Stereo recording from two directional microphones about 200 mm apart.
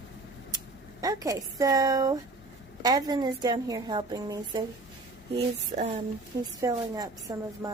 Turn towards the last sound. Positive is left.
turn(degrees=-15)  # may be behind; listen again after turning